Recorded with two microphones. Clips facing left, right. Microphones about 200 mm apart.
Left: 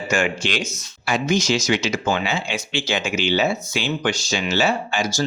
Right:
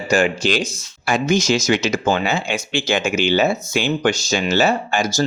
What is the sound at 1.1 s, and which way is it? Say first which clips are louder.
Speech: right 3 dB; 45° right (ahead or behind).